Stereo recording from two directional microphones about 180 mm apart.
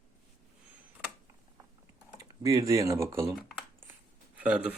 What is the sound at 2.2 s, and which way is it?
Speech, 20° right (ahead or behind).